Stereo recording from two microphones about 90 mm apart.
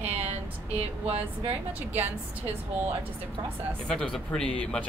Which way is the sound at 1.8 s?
20° right (ahead or behind).